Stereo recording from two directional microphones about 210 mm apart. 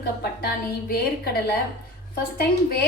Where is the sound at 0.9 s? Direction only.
45° left (ahead or behind).